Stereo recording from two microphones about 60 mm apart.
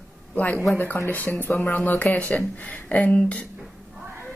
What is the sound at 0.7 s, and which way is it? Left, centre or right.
Speech, left.